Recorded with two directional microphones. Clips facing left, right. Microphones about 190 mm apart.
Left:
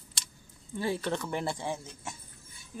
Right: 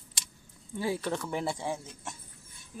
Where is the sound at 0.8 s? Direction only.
5° right (ahead or behind).